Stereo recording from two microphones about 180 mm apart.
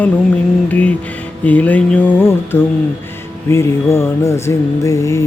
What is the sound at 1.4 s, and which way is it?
Music, 10° left (ahead or behind).